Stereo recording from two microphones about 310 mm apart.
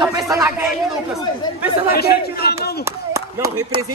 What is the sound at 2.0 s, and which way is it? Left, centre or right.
Speech, left.